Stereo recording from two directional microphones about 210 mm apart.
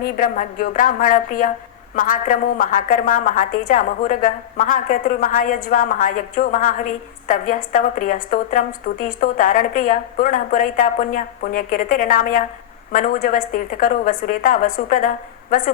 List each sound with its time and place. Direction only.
0.0 s a woman's voice: 45° left (ahead or behind)